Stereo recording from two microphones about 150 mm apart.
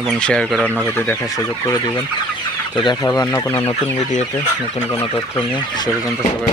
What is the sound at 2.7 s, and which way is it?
Speech, 30° left (ahead or behind).